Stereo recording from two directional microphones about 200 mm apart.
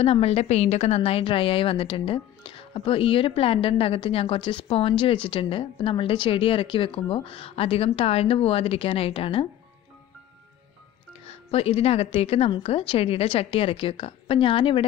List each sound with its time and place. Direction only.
0.0 s a woman's voice: 30° left (ahead or behind)
11.2 s a woman's voice: 30° left (ahead or behind)